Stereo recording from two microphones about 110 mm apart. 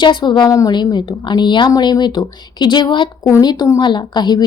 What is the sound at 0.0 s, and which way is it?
A woman's voice, 45° left (ahead or behind).